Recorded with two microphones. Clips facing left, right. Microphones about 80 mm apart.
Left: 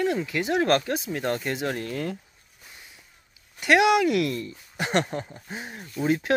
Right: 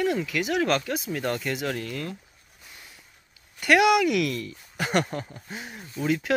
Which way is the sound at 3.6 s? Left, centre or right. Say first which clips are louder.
Even; left.